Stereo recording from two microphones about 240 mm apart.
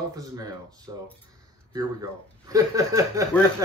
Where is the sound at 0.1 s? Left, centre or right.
Centre.